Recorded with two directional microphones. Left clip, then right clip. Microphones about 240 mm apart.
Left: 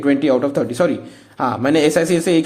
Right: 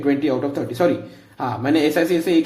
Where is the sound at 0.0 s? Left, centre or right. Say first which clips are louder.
Left 4 dB; left.